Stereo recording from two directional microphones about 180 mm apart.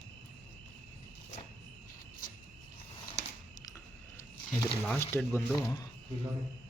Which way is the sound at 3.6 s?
20° left (ahead or behind).